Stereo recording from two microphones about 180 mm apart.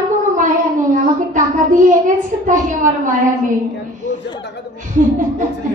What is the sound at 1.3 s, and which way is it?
Speech, 45° right (ahead or behind).